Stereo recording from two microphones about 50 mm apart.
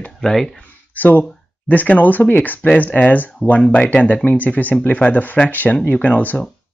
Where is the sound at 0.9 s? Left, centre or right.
Left.